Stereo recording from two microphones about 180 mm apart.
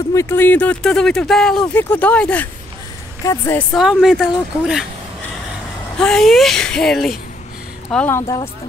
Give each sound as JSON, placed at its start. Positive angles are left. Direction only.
{"t": 0.1, "sound": "speech", "side_deg": 15}
{"t": 3.7, "sound": "speech", "side_deg": 0}
{"t": 5.9, "sound": "speech", "side_deg": 5}